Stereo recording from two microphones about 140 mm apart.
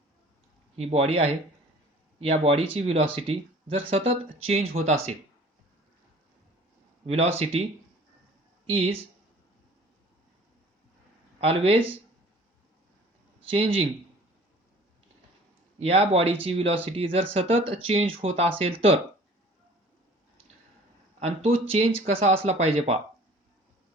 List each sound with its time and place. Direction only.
0.8 s speech: 45° right (ahead or behind)
7.1 s speech: 45° right (ahead or behind)
8.6 s speech: 45° right (ahead or behind)
11.3 s speech: 45° right (ahead or behind)
13.4 s speech: 40° right (ahead or behind)
15.8 s speech: 45° right (ahead or behind)
21.2 s speech: 45° right (ahead or behind)